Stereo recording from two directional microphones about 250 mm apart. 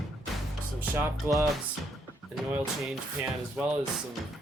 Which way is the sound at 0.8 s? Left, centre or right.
Centre.